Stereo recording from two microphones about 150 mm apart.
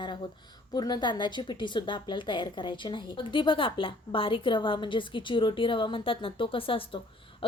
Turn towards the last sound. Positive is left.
turn(degrees=35)  # may be behind; listen again after turning